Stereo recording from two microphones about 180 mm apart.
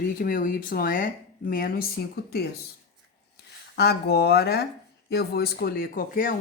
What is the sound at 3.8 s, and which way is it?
A woman's voice, 65° left (ahead or behind).